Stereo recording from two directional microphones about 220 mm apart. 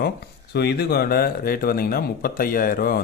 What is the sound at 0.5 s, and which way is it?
Speech, 50° left (ahead or behind).